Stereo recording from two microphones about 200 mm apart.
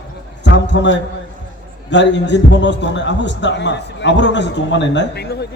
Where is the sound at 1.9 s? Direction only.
60° left (ahead or behind).